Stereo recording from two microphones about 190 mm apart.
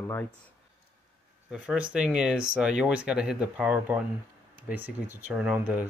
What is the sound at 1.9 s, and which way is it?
Speech, 5° right (ahead or behind).